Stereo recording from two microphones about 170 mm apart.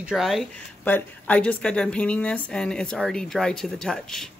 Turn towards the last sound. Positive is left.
turn(degrees=5)  # may be behind; listen again after turning